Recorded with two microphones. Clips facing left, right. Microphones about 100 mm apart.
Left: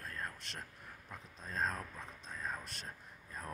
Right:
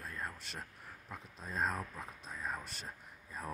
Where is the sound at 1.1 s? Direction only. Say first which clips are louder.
Right 2 dB; 5° right (ahead or behind).